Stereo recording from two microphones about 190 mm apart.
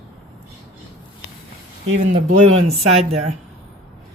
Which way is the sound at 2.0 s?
40° right (ahead or behind).